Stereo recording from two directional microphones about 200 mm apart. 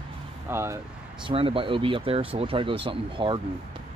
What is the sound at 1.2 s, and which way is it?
Speech, 25° right (ahead or behind).